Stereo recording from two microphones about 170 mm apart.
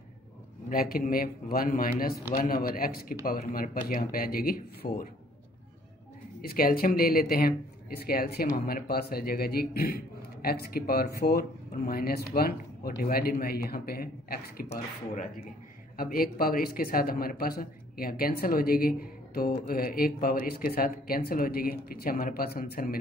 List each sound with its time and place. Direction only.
0.7 s a man's voice: 55° left (ahead or behind)
6.4 s a man's voice: 60° left (ahead or behind)
16.0 s a man's voice: 60° left (ahead or behind)